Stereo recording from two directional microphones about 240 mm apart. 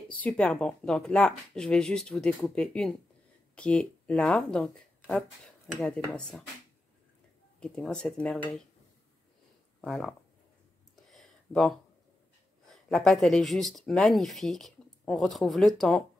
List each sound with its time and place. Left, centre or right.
0.1 s speech: centre
7.6 s speech: centre
9.8 s speech: centre
11.1 s a sound: centre
12.6 s speech: centre